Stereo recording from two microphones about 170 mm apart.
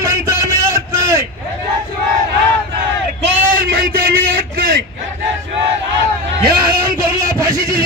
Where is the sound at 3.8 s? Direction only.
65° right (ahead or behind).